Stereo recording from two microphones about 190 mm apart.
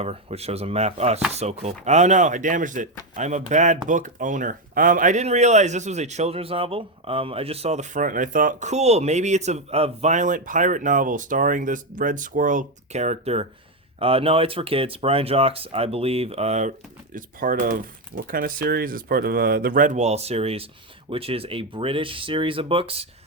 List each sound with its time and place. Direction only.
0.0 s speech: 35° right (ahead or behind)